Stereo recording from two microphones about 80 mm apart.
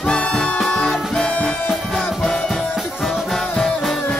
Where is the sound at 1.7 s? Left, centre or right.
Centre.